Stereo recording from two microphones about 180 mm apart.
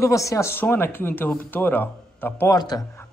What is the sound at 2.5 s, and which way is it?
Speech, 20° left (ahead or behind).